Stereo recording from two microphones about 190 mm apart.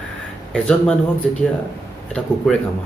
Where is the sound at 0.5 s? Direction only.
5° left (ahead or behind).